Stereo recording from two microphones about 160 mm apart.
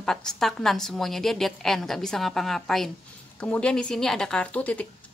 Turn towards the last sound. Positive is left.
turn(degrees=10)  # may be behind; listen again after turning